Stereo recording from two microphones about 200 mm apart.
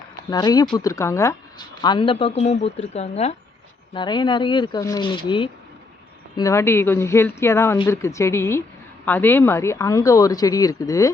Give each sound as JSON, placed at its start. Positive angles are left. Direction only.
{"t": 0.3, "sound": "speech", "side_deg": 20}
{"t": 3.9, "sound": "speech", "side_deg": 20}